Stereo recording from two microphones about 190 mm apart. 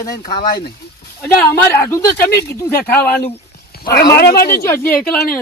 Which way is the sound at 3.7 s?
55° left (ahead or behind).